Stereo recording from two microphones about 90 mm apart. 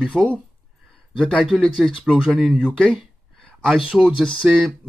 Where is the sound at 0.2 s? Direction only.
5° right (ahead or behind).